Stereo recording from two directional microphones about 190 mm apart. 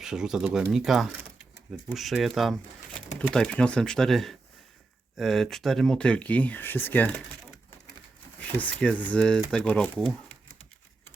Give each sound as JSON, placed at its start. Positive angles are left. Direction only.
{"t": 0.0, "sound": "speech", "side_deg": -5}
{"t": 8.4, "sound": "speech", "side_deg": 10}